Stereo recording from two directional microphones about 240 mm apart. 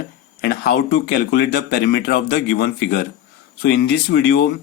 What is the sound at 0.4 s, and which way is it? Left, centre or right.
Speech, left.